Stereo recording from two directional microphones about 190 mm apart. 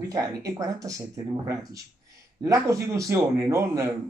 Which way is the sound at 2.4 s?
15° right (ahead or behind).